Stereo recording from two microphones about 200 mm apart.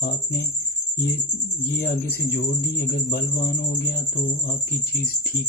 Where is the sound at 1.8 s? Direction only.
50° left (ahead or behind).